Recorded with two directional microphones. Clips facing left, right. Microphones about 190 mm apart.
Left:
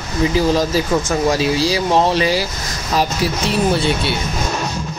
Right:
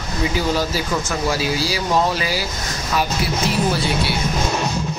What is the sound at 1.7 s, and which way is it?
Speech, 30° left (ahead or behind).